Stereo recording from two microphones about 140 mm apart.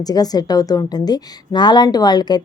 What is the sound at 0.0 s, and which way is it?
A woman's voice, 25° left (ahead or behind).